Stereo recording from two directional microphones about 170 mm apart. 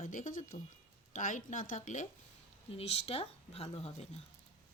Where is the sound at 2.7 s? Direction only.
35° left (ahead or behind).